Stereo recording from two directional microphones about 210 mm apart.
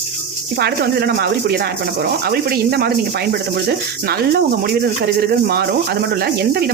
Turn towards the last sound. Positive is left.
turn(degrees=-50)  # may be behind; listen again after turning